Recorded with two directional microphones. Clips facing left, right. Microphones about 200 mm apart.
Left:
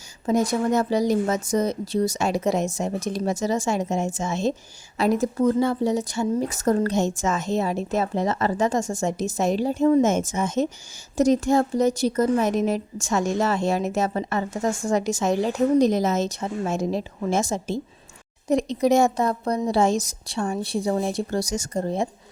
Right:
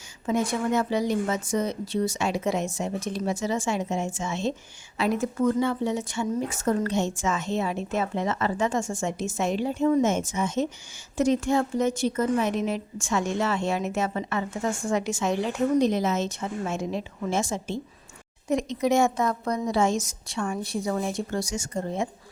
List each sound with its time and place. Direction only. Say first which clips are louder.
0.3 s a woman's voice: left 4 dB; 40° left (ahead or behind)